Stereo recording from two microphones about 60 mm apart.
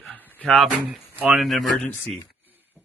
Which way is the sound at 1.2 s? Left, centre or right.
Right.